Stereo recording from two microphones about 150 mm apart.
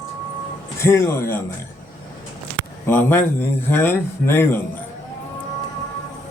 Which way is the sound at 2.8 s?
15° left (ahead or behind).